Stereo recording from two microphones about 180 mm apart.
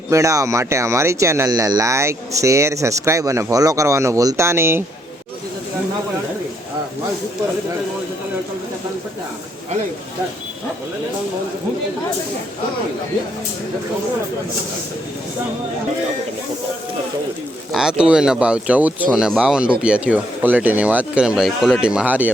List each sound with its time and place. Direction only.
0.1 s speech: 15° right (ahead or behind)
17.7 s speech: 5° right (ahead or behind)